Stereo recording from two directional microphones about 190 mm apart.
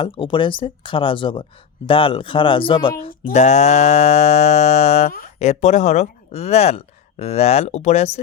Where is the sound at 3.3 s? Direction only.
40° left (ahead or behind).